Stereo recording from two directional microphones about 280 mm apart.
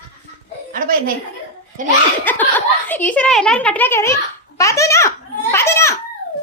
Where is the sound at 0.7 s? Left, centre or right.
Right.